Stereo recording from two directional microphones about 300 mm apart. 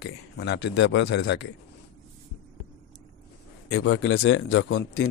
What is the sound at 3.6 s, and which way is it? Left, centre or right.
Speech, left.